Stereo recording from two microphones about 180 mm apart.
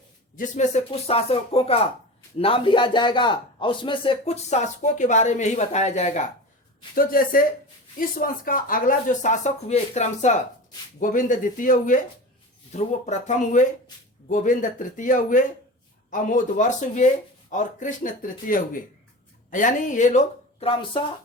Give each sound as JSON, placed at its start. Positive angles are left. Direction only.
{"t": 0.3, "sound": "speech", "side_deg": 40}
{"t": 6.9, "sound": "speech", "side_deg": 55}